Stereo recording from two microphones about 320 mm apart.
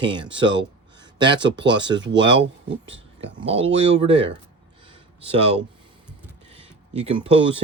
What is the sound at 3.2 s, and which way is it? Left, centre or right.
Speech, centre.